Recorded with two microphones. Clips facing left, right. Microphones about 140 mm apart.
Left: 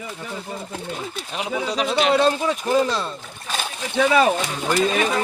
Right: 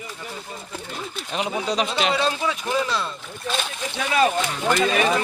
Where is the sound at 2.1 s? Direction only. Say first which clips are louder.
Left 5 dB; 50° left (ahead or behind).